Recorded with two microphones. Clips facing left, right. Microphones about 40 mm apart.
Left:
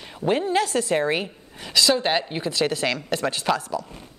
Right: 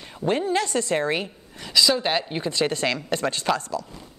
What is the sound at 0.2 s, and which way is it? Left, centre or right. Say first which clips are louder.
A woman's voice: left 1 dB; centre.